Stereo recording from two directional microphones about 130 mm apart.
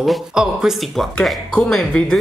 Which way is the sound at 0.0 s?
5° right (ahead or behind).